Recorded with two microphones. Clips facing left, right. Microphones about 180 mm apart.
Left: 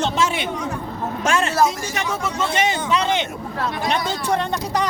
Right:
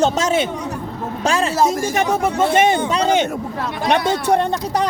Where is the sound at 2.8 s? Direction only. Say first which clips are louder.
Right 4 dB; 40° right (ahead or behind).